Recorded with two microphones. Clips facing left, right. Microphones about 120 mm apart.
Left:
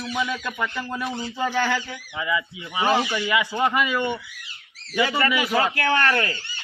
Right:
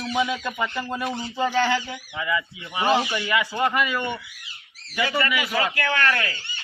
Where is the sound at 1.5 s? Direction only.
Centre (ahead or behind).